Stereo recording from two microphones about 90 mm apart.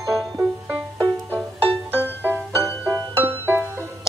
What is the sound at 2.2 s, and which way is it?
Music, 25° right (ahead or behind).